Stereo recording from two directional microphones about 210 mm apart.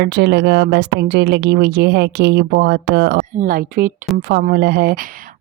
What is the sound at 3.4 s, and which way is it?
A woman's voice, 40° right (ahead or behind).